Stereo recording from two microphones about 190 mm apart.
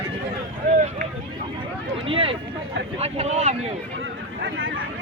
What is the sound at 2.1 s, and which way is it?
Speech, 30° right (ahead or behind).